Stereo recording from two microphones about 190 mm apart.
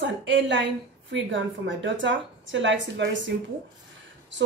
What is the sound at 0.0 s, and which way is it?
A woman's voice, 70° right (ahead or behind).